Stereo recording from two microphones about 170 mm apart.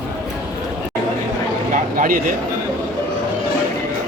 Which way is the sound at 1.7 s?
50° right (ahead or behind).